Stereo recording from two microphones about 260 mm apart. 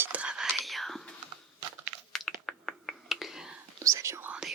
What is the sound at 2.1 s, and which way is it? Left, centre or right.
Finger snapping, centre.